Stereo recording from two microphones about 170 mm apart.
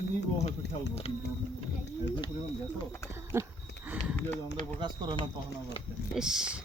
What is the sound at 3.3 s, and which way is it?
Speech, 15° right (ahead or behind).